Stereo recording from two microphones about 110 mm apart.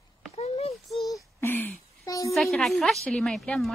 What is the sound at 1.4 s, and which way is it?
Speech, 20° left (ahead or behind).